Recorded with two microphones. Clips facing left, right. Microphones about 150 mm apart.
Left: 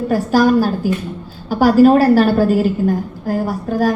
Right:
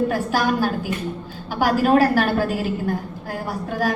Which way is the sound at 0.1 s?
40° left (ahead or behind).